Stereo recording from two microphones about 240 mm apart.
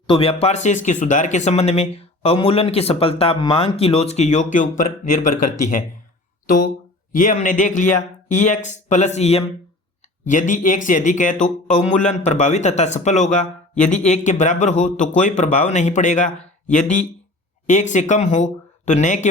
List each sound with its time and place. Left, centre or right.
0.1 s a man's voice: left
7.1 s a man's voice: left